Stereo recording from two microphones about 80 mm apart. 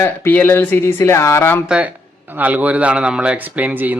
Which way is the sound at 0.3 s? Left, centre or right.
Left.